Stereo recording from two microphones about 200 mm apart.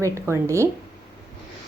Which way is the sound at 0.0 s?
15° right (ahead or behind).